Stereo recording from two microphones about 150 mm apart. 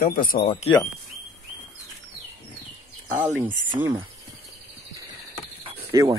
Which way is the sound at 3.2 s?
10° right (ahead or behind).